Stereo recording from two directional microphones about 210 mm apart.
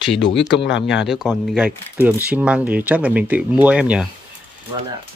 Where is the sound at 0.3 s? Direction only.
Centre (ahead or behind).